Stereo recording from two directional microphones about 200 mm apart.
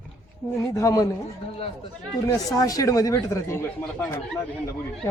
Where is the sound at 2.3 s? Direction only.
15° left (ahead or behind).